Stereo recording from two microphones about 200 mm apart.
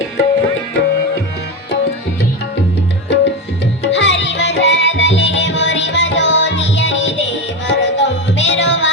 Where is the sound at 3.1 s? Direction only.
60° left (ahead or behind).